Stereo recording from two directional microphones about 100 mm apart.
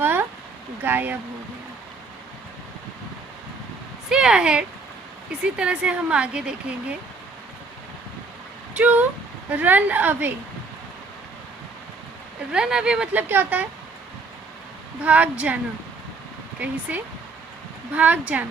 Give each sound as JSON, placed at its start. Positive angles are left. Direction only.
{"t": 0.0, "sound": "a sound", "side_deg": -20}
{"t": 0.8, "sound": "speech", "side_deg": -20}
{"t": 4.1, "sound": "speech", "side_deg": -5}
{"t": 8.7, "sound": "speech", "side_deg": -15}
{"t": 12.5, "sound": "speech", "side_deg": -5}
{"t": 13.2, "sound": "speech", "side_deg": -20}
{"t": 15.0, "sound": "speech", "side_deg": -15}
{"t": 16.9, "sound": "speech", "side_deg": -15}